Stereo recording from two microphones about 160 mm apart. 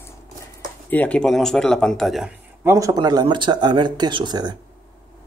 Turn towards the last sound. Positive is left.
turn(degrees=-25)  # may be behind; listen again after turning